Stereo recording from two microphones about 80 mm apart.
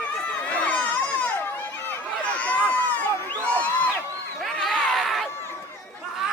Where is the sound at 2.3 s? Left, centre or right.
Centre.